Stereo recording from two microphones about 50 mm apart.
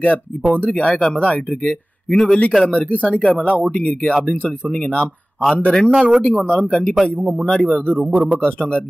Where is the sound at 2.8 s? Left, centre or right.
Left.